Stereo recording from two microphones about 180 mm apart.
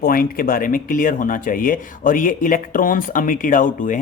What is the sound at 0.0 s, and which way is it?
Speech, 55° left (ahead or behind).